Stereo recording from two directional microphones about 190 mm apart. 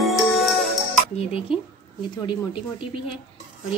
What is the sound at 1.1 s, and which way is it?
Dishes, 30° left (ahead or behind).